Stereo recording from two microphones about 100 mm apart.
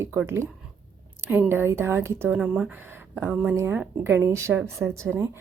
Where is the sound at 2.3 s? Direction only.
10° right (ahead or behind).